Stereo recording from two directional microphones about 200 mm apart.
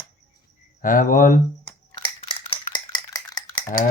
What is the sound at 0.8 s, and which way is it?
Speech, 45° left (ahead or behind).